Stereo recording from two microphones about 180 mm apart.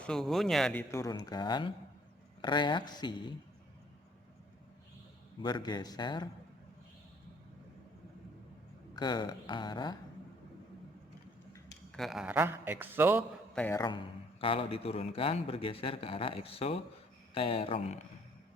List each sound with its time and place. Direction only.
0.0 s speech: 5° left (ahead or behind); by 3.3 s 25° left (ahead or behind)
5.4 s speech: 25° left (ahead or behind)
9.0 s speech: 25° left (ahead or behind)
11.9 s a man's voice: centre (ahead or behind)
13.5 s a man's voice: 5° left (ahead or behind)
13.7 s a man's voice: 25° left (ahead or behind)